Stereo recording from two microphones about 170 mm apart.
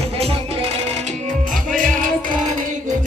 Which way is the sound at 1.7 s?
50° right (ahead or behind).